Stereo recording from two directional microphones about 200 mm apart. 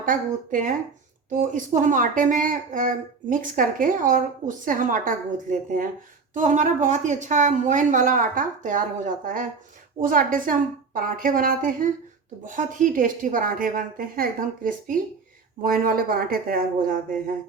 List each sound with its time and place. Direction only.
0.0 s a woman's voice: 40° right (ahead or behind)